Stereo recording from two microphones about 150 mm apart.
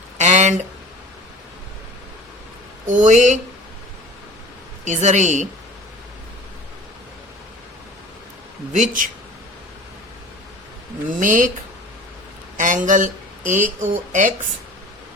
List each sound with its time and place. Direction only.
0.2 s a sound: 50° right (ahead or behind)
2.8 s speech: 55° right (ahead or behind)
4.9 s a woman's voice: 50° right (ahead or behind)
8.7 s speech: 60° right (ahead or behind)
11.2 s speech: 60° right (ahead or behind)
12.5 s speech: 60° right (ahead or behind)